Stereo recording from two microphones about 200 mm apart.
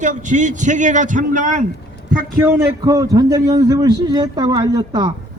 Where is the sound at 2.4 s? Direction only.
15° right (ahead or behind).